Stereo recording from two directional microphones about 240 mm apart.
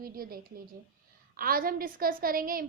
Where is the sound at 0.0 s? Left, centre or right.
Right.